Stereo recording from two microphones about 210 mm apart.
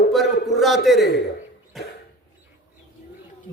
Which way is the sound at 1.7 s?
Centre (ahead or behind).